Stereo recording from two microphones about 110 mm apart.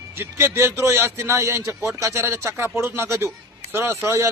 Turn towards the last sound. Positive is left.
turn(degrees=-25)  # may be behind; listen again after turning